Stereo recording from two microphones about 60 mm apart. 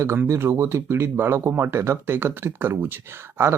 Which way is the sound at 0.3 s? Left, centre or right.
Right.